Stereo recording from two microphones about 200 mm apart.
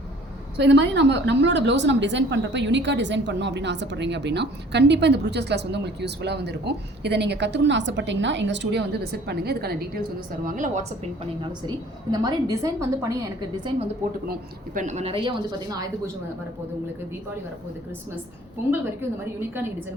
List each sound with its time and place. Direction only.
0.5 s a woman's voice: 60° right (ahead or behind)
10.4 s a woman's voice: 40° right (ahead or behind)
12.1 s a woman's voice: 20° right (ahead or behind)
14.8 s a woman's voice: 35° right (ahead or behind); by 15.9 s 20° right (ahead or behind)